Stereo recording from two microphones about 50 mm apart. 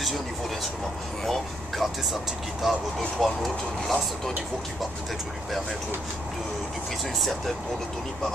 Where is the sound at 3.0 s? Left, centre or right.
Centre.